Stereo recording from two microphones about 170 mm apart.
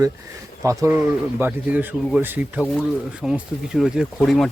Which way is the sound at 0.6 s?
20° right (ahead or behind).